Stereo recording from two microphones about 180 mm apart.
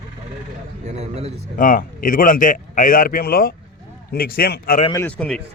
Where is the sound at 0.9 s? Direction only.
35° right (ahead or behind).